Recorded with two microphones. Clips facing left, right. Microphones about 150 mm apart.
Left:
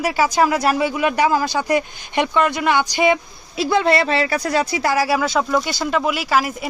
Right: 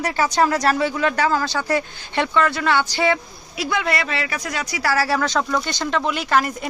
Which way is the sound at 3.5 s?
30° left (ahead or behind).